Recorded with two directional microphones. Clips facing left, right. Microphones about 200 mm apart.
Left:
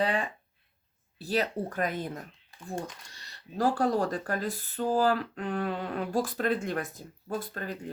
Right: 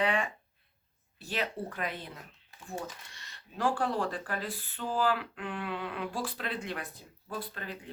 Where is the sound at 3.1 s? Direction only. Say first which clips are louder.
Left 6 dB; 35° left (ahead or behind).